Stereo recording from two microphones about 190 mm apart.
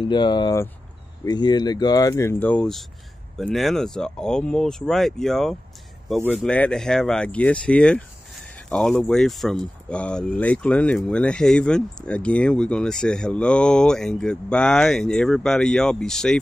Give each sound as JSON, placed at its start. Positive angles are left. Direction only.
{"t": 0.0, "sound": "speech", "side_deg": 25}